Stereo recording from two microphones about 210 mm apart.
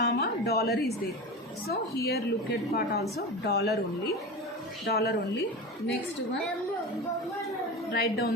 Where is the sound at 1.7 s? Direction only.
50° left (ahead or behind).